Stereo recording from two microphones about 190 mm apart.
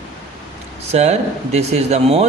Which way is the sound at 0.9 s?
35° right (ahead or behind).